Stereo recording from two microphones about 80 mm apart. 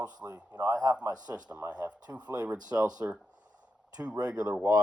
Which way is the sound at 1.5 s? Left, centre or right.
Centre.